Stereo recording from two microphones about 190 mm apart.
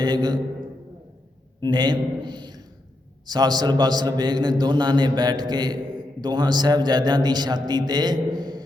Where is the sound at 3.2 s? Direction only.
20° right (ahead or behind).